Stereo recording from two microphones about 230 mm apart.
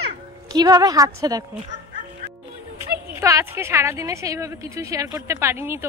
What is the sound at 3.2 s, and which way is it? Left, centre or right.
A woman's voice, centre.